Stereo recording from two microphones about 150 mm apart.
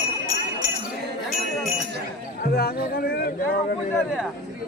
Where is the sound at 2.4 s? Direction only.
90° left.